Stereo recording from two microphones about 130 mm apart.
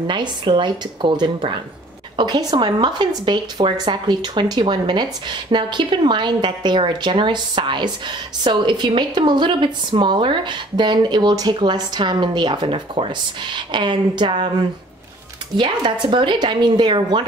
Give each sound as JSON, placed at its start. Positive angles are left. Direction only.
{"t": 0.0, "sound": "speech", "side_deg": -35}
{"t": 15.5, "sound": "speech", "side_deg": -40}